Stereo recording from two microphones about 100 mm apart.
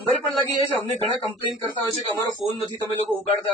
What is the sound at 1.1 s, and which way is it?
Speech, 65° left (ahead or behind).